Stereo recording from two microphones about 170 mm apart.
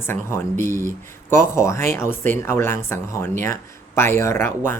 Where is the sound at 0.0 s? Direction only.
15° left (ahead or behind).